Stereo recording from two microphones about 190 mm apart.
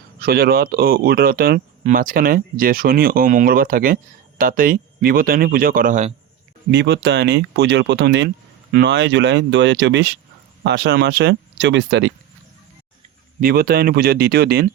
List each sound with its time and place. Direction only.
0.2 s speech: 50° right (ahead or behind)
6.7 s speech: 60° right (ahead or behind)
13.4 s speech: 55° right (ahead or behind)